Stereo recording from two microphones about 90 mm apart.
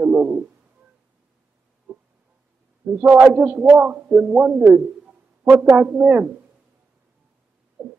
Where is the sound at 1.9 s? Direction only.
20° right (ahead or behind).